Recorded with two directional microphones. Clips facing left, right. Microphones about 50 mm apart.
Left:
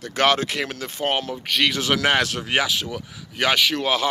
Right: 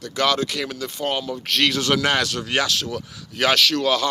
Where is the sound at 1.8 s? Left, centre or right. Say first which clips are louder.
Even; centre.